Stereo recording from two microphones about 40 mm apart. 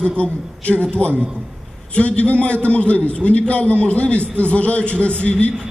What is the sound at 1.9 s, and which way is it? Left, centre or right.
A man's voice, left.